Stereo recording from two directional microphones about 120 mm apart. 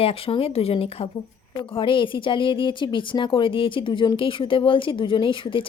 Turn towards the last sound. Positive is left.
turn(degrees=45)  # may be behind; listen again after turning